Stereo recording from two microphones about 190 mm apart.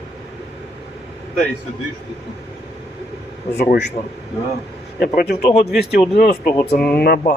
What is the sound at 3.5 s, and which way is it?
A man's voice, 55° left (ahead or behind).